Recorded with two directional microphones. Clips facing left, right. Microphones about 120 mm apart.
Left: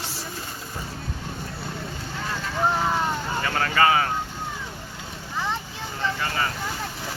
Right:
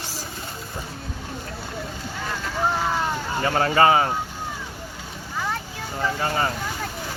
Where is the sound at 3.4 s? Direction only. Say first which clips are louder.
Right 4 dB; 25° right (ahead or behind).